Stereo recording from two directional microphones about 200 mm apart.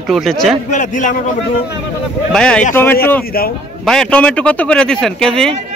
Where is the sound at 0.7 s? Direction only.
40° left (ahead or behind).